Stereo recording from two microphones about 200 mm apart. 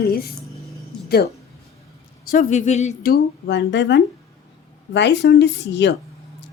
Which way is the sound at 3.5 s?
65° left (ahead or behind).